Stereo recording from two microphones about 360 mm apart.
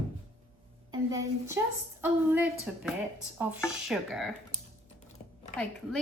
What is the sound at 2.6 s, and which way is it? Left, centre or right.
A woman's voice, centre.